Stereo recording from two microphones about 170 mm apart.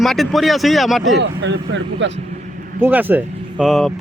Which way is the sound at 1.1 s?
90° right.